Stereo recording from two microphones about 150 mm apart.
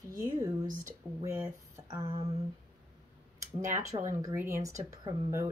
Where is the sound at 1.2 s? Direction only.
15° right (ahead or behind).